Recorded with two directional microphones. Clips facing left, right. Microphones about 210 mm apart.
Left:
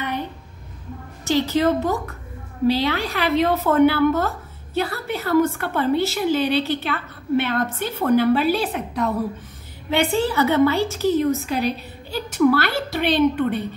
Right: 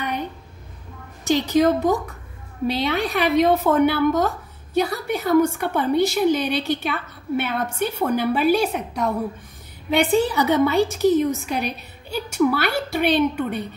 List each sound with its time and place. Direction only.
1.2 s a woman's voice: 15° right (ahead or behind)
10.1 s a woman's voice: 15° right (ahead or behind)